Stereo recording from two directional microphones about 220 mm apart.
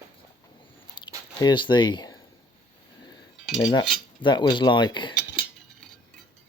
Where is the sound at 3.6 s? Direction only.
20° left (ahead or behind).